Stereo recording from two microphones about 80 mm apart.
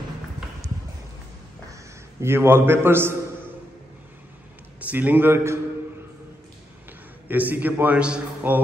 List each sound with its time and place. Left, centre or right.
1.7 s a man's voice: right
4.7 s a man's voice: right
6.9 s a man's voice: right